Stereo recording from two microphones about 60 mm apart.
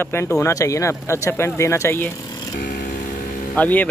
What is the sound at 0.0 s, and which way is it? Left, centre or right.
Speech, left.